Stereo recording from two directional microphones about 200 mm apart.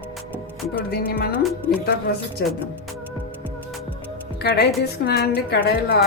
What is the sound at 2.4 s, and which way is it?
Speech, 55° left (ahead or behind).